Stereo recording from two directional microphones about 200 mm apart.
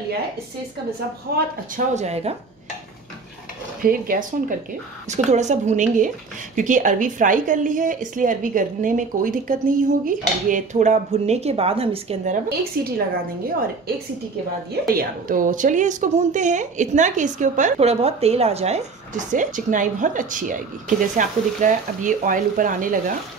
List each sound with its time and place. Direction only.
1.3 s speech: 55° right (ahead or behind)
2.0 s a woman's voice: 30° right (ahead or behind)
3.8 s a woman's voice: 45° right (ahead or behind); by 12.4 s 30° right (ahead or behind)
12.4 s speech: 50° right (ahead or behind)
14.7 s a woman's voice: 45° right (ahead or behind)